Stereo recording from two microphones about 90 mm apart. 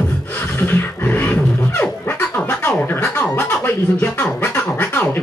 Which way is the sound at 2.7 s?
25° left (ahead or behind).